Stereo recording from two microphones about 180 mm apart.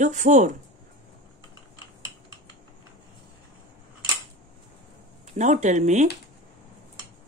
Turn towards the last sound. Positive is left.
turn(degrees=-40)  # may be behind; listen again after turning